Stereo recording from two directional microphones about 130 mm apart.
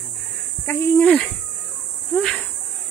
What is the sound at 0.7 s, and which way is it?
Speech, 20° left (ahead or behind).